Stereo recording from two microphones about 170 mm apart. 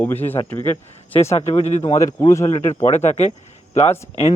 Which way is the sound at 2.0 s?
20° left (ahead or behind).